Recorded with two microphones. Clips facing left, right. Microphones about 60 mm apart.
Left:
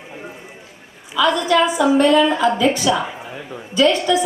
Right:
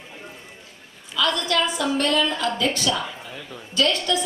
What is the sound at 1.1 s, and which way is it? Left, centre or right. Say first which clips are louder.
A woman's voice: left 7 dB; centre.